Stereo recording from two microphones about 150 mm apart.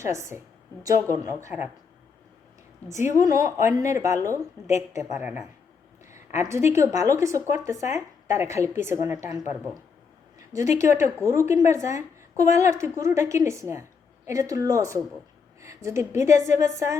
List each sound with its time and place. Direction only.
0.0 s a woman's voice: 20° right (ahead or behind)
3.0 s a woman's voice: 20° right (ahead or behind)
6.4 s a woman's voice: 20° right (ahead or behind)
10.3 s a sound: 20° right (ahead or behind)
10.8 s a woman's voice: 20° right (ahead or behind)